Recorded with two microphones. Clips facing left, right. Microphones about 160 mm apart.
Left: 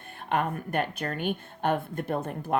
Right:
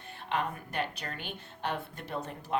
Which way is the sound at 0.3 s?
50° left (ahead or behind).